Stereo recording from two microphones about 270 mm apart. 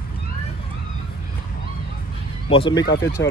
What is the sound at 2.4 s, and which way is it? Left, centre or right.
Speech, centre.